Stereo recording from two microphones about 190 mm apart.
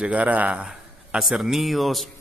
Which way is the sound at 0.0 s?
5° right (ahead or behind).